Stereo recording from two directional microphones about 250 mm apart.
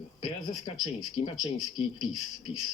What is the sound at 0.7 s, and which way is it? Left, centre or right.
Speech, left.